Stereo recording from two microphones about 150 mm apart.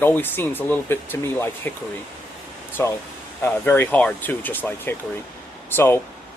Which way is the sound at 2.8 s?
15° left (ahead or behind).